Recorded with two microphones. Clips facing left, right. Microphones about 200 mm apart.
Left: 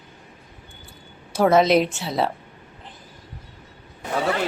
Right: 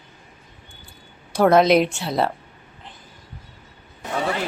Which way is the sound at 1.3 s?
Centre (ahead or behind).